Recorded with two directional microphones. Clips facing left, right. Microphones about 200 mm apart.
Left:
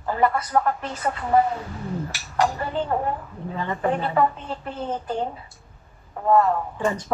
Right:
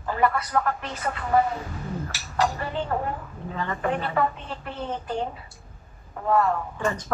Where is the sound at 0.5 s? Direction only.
30° left (ahead or behind).